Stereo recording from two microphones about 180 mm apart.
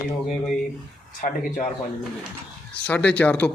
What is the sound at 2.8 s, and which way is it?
Speech, 5° left (ahead or behind).